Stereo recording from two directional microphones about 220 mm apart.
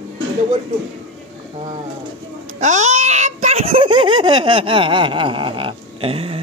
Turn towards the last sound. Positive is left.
turn(degrees=-25)  # may be behind; listen again after turning